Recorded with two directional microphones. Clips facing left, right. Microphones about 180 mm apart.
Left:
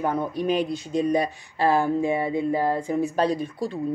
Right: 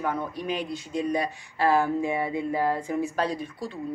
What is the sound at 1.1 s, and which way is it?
Speech, 20° left (ahead or behind).